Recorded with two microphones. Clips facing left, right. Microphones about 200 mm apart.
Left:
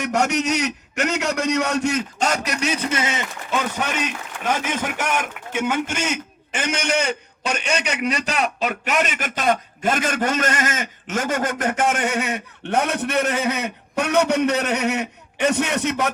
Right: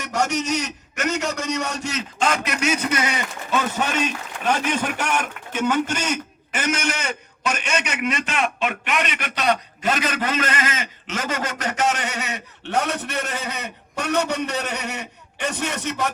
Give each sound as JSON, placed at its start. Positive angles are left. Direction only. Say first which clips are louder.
{"t": 0.0, "sound": "a man's voice", "louder": "left 3 dB", "side_deg": 60}
{"t": 5.5, "sound": "a man's voice", "louder": "right 1 dB", "side_deg": 10}
{"t": 6.5, "sound": "a man's voice", "louder": "left 2 dB", "side_deg": 30}